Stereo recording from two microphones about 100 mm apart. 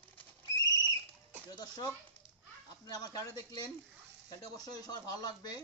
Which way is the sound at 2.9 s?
40° left (ahead or behind).